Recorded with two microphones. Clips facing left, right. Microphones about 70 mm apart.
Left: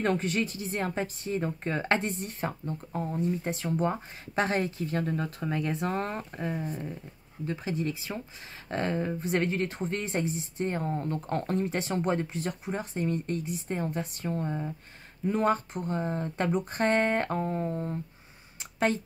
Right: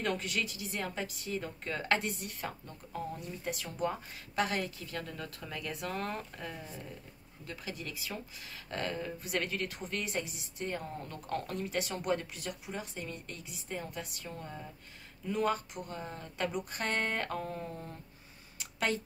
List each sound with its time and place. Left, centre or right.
0.0 s speech: left
7.4 s speech: left
18.6 s a sound: left